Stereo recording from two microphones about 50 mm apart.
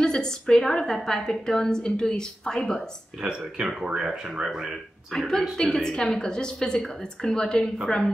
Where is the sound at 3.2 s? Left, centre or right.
Centre.